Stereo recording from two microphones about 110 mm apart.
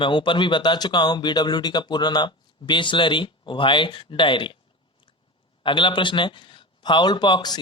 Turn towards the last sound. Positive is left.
turn(degrees=40)  # may be behind; listen again after turning